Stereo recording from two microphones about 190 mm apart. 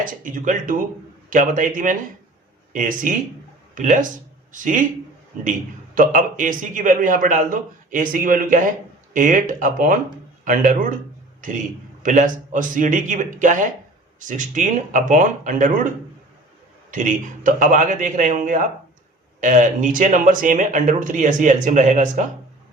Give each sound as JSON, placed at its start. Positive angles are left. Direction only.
{"t": 0.0, "sound": "a man's voice", "side_deg": -45}
{"t": 16.9, "sound": "a man's voice", "side_deg": -45}